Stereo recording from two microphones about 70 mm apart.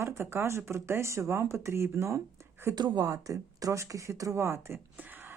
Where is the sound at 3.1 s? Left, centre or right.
Right.